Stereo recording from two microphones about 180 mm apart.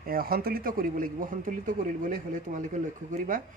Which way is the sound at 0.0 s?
55° right (ahead or behind).